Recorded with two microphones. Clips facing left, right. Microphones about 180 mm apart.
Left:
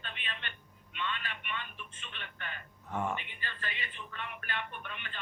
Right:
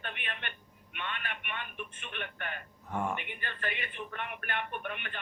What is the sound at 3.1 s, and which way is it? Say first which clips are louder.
A man's voice: right 2 dB; 55° right (ahead or behind).